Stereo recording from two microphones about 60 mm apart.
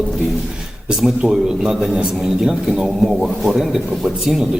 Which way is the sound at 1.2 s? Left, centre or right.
Centre.